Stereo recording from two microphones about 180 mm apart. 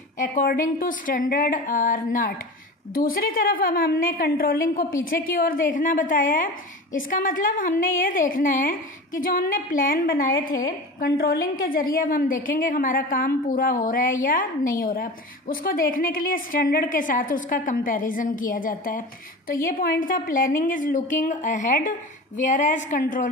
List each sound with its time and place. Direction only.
0.2 s a woman's voice: 50° left (ahead or behind)